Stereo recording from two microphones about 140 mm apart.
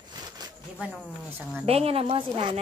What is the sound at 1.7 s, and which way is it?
Speech, 45° right (ahead or behind).